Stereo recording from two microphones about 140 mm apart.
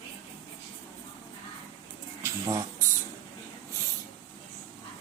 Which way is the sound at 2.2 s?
20° right (ahead or behind).